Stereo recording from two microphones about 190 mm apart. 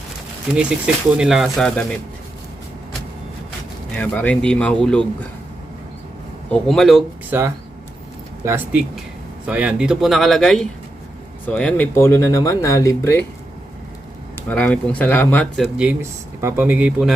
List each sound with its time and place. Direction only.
1.2 s speech: centre (ahead or behind)
3.9 s speech: 5° left (ahead or behind)
6.5 s speech: centre (ahead or behind)
8.4 s speech: 10° right (ahead or behind); by 13.2 s 15° left (ahead or behind)
14.3 s speech: 10° left (ahead or behind)
15.6 s speech: 5° right (ahead or behind)